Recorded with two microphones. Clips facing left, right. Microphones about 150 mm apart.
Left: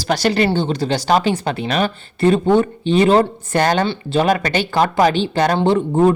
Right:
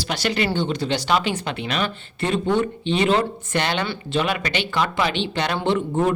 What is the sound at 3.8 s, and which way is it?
Speech, 30° left (ahead or behind).